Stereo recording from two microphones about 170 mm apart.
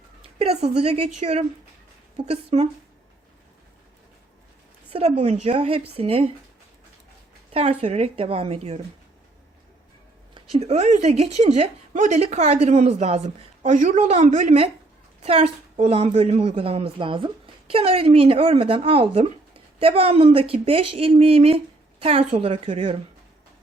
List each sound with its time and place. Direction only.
0.3 s a woman's voice: 35° right (ahead or behind)
4.9 s a woman's voice: 35° right (ahead or behind)
7.5 s a woman's voice: 40° right (ahead or behind)
10.3 s a woman's voice: 35° right (ahead or behind)